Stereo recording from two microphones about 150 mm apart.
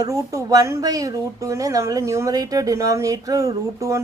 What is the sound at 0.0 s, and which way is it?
Speech, 25° right (ahead or behind).